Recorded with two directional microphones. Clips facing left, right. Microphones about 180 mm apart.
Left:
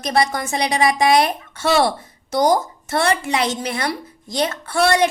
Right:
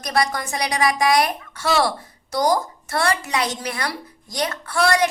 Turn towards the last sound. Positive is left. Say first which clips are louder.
# left 3 dB
turn(degrees=25)  # may be behind; listen again after turning